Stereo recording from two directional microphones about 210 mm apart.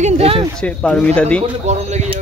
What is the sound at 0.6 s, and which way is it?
Speech, 5° left (ahead or behind).